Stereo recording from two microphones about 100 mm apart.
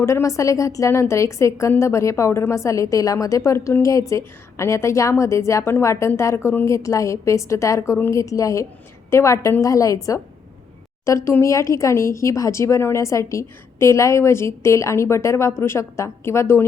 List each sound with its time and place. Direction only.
0.0 s a woman's voice: 30° left (ahead or behind)